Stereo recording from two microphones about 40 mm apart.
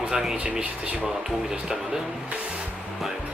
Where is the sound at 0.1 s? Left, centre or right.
Centre.